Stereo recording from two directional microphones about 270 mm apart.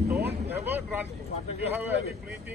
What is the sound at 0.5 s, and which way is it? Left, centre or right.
Speech, centre.